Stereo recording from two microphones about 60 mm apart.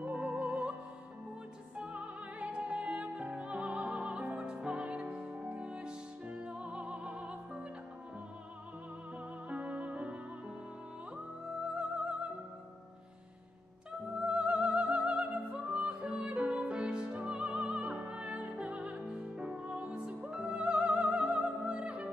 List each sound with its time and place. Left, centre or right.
0.0 s music: right
1.8 s music: centre
9.5 s music: right
14.1 s music: centre